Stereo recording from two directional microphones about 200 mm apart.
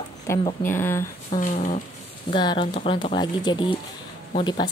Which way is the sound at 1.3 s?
40° left (ahead or behind).